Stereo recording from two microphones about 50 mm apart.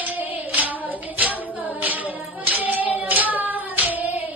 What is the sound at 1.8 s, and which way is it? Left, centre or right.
Child singing, right.